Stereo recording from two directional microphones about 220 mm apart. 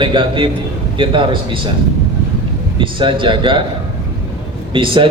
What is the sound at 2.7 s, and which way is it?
Speech, 20° right (ahead or behind).